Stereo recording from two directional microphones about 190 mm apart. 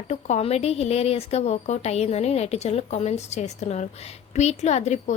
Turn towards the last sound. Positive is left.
turn(degrees=35)  # may be behind; listen again after turning